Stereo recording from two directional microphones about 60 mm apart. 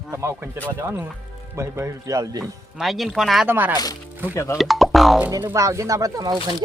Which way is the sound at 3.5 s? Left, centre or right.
Right.